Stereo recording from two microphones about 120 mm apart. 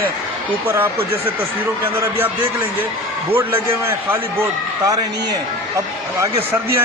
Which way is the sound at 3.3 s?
20° right (ahead or behind).